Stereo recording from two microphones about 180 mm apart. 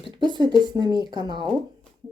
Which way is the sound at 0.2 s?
25° right (ahead or behind).